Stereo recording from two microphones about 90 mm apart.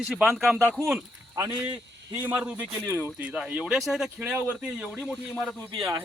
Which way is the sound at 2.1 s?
20° right (ahead or behind).